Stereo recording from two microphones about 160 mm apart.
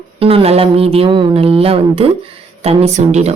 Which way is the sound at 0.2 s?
35° right (ahead or behind).